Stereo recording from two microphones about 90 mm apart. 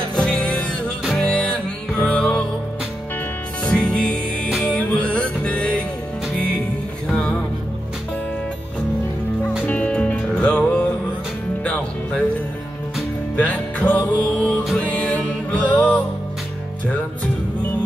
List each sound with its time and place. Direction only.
0.1 s music: 10° left (ahead or behind)
3.8 s music: 10° left (ahead or behind)
9.7 s music: 15° left (ahead or behind)
13.4 s music: 20° left (ahead or behind)